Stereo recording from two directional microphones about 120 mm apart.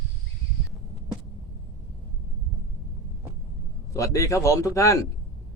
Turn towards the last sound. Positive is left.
turn(degrees=25)  # may be behind; listen again after turning